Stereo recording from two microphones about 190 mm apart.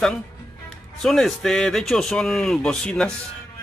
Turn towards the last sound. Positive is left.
turn(degrees=5)  # may be behind; listen again after turning